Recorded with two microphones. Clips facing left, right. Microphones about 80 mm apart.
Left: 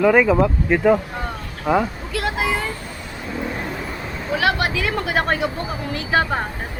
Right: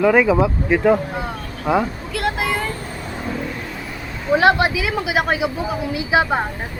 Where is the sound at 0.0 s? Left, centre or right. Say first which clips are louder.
Even; centre.